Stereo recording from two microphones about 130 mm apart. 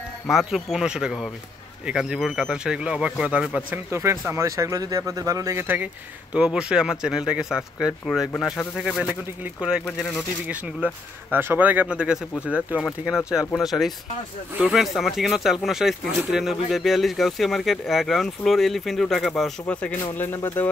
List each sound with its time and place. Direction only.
0.3 s speech: centre (ahead or behind)
3.9 s speech: 20° right (ahead or behind)
12.5 s speech: 10° left (ahead or behind)
13.0 s speech: 5° right (ahead or behind); by 20.6 s 20° left (ahead or behind)